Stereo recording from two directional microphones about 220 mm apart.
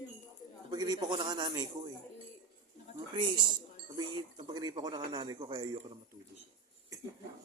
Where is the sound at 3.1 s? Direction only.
20° right (ahead or behind).